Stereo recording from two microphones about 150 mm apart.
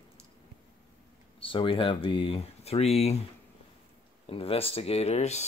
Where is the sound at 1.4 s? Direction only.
35° left (ahead or behind).